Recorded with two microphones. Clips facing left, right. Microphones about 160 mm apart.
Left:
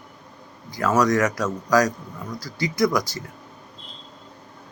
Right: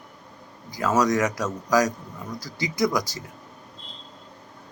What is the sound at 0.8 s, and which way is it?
Speech, 20° right (ahead or behind).